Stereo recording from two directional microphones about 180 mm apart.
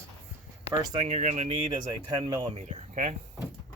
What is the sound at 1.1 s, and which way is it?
Speech, 40° right (ahead or behind).